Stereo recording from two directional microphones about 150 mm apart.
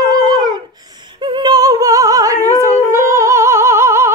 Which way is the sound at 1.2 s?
30° right (ahead or behind).